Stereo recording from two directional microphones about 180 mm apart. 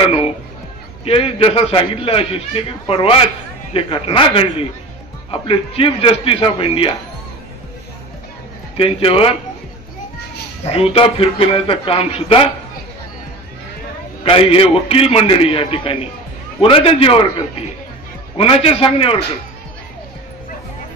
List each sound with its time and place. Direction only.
1.0 s a man's voice: 35° left (ahead or behind)
8.7 s a man's voice: 30° left (ahead or behind)
10.6 s a man's voice: 35° left (ahead or behind)
14.2 s a man's voice: 30° left (ahead or behind)
18.4 s a man's voice: 30° left (ahead or behind)